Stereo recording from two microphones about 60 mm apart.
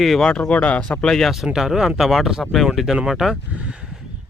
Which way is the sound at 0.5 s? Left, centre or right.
Left.